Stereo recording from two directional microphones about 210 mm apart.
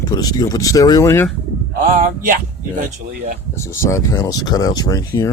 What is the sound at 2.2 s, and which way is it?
Speech, 40° right (ahead or behind).